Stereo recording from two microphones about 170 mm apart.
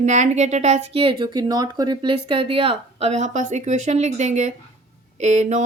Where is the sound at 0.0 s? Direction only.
45° right (ahead or behind).